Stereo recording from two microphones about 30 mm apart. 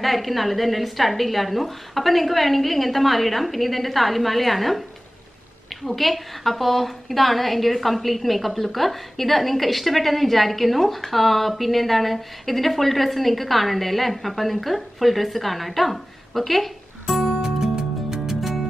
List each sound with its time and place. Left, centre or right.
0.0 s a woman's voice: centre
5.9 s a woman's voice: centre
17.0 s music: centre
17.6 s music: centre
18.2 s music: centre